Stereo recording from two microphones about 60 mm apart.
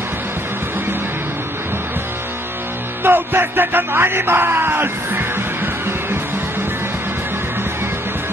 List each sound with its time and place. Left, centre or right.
3.0 s speech: right